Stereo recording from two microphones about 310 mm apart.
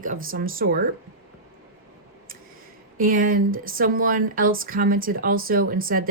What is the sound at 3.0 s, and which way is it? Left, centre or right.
Speech, right.